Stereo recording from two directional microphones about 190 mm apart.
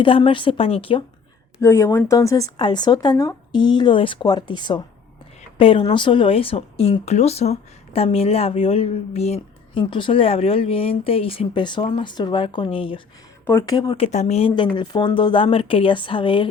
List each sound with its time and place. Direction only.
0.0 s speech: 25° left (ahead or behind)
1.6 s speech: 15° left (ahead or behind)
13.4 s speech: 15° left (ahead or behind)